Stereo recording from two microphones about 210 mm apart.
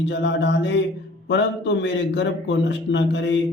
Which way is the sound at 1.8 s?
55° left (ahead or behind).